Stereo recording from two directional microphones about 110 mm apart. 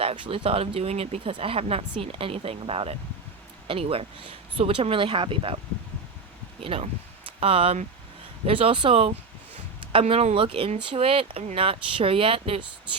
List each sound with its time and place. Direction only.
0.0 s speech: 60° right (ahead or behind)
1.3 s speech: 60° right (ahead or behind)
6.6 s speech: 60° right (ahead or behind)